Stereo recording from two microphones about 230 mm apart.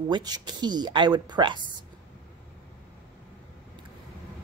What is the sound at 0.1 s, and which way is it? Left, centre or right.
Speech, centre.